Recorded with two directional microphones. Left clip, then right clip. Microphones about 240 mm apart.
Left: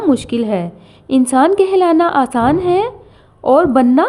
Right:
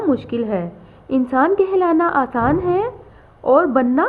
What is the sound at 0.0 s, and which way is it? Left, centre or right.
A woman's voice, left.